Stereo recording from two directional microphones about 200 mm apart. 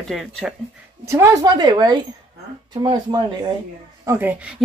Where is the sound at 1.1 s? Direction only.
15° right (ahead or behind).